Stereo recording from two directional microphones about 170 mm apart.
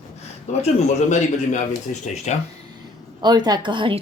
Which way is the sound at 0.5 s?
40° left (ahead or behind).